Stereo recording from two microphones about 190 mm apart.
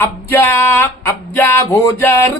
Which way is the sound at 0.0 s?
10° left (ahead or behind).